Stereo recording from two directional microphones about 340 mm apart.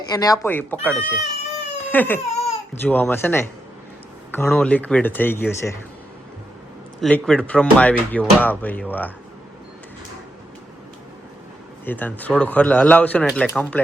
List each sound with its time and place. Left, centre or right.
0.1 s speech: centre
2.3 s baby cry: centre
2.8 s speech: centre
7.0 s speech: centre
11.9 s speech: centre